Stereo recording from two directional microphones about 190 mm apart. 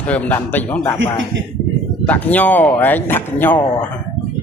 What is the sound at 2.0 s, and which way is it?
Speech, 10° left (ahead or behind).